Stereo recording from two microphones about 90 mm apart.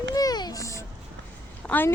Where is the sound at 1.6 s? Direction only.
20° left (ahead or behind).